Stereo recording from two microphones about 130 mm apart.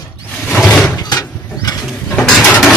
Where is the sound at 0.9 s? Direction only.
30° left (ahead or behind).